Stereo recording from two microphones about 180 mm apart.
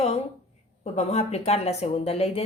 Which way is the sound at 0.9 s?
35° left (ahead or behind).